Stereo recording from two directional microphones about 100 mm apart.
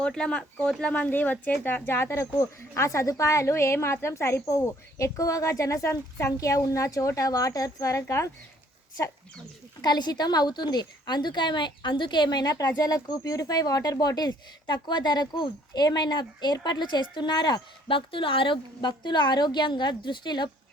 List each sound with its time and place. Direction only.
0.0 s speech: 10° left (ahead or behind); by 8.3 s 30° left (ahead or behind)
9.8 s a woman's voice: 45° left (ahead or behind)